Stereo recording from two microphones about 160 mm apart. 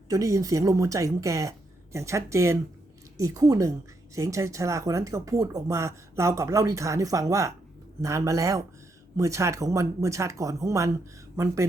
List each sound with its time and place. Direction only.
0.1 s speech: 20° right (ahead or behind)